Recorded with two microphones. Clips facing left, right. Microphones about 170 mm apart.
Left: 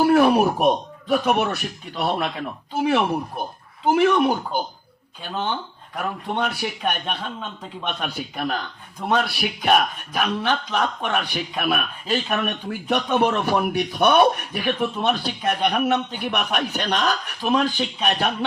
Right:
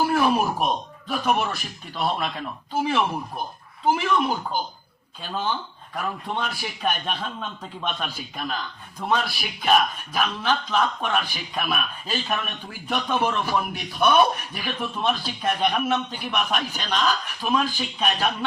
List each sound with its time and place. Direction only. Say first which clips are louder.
0.0 s a man's voice: left 5 dB; 60° left (ahead or behind)
6.0 s a man's voice: left 3 dB; 60° left (ahead or behind)